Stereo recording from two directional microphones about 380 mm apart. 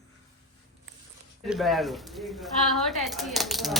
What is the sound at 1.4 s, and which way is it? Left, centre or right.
Speech, centre.